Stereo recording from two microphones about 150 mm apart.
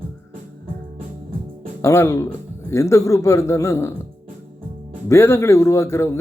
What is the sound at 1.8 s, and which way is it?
Speech, 20° left (ahead or behind).